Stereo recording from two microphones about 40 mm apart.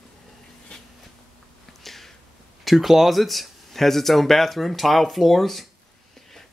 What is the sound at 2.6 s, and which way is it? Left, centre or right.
Speech, centre.